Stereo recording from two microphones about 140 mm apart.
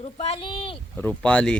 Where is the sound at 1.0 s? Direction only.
10° left (ahead or behind).